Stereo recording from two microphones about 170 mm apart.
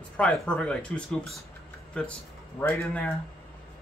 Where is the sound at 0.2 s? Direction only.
5° left (ahead or behind).